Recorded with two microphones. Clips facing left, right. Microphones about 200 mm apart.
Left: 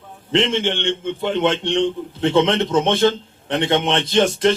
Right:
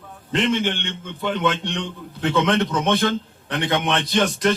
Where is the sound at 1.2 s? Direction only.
25° left (ahead or behind).